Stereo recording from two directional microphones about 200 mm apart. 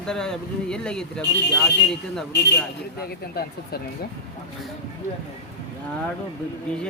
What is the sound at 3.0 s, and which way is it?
Speech, 50° left (ahead or behind).